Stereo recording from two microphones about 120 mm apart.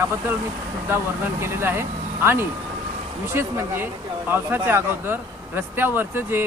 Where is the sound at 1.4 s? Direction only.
20° right (ahead or behind).